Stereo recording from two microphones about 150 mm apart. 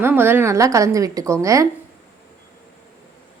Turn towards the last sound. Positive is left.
turn(degrees=-20)  # may be behind; listen again after turning